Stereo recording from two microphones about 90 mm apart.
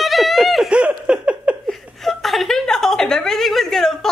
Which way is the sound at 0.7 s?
10° right (ahead or behind).